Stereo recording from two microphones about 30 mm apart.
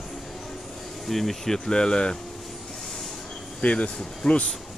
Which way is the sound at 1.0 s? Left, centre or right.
Centre.